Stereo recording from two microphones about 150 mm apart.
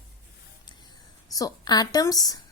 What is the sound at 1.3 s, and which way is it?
A woman's voice, 25° left (ahead or behind).